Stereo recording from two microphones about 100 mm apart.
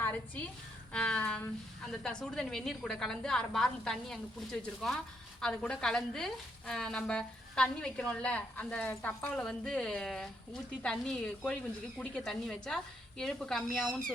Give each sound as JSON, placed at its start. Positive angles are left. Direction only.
{"t": 0.0, "sound": "a sound", "side_deg": 15}
{"t": 0.9, "sound": "a woman's voice", "side_deg": 10}
{"t": 9.3, "sound": "a woman's voice", "side_deg": 5}